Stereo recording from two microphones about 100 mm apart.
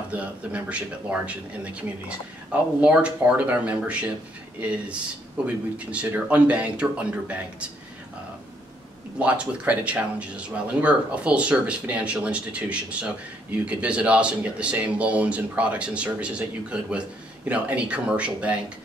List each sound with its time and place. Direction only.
0.1 s speech: 15° right (ahead or behind)
9.2 s speech: 15° right (ahead or behind)